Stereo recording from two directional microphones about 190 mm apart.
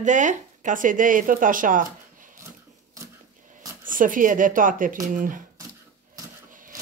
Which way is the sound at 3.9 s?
45° right (ahead or behind).